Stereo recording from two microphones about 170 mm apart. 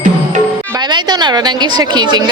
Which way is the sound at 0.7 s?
25° right (ahead or behind).